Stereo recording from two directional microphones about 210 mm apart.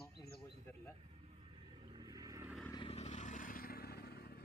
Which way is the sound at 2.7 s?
25° left (ahead or behind).